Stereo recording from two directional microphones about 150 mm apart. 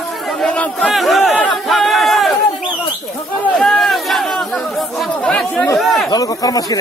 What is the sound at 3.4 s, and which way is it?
Speech, centre (ahead or behind).